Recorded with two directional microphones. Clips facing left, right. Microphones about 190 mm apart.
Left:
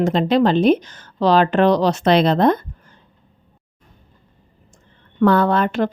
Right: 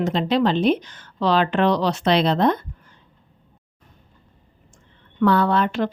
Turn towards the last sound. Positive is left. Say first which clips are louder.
# left 3 dB
turn(degrees=50)  # may be behind; listen again after turning